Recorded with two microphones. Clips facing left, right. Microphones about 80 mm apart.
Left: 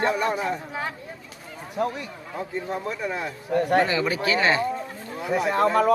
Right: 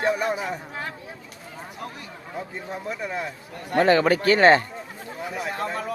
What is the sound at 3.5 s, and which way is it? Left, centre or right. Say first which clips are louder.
Speech: left 6 dB; left.